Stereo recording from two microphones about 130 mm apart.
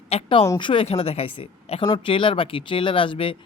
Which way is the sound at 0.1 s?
50° left (ahead or behind).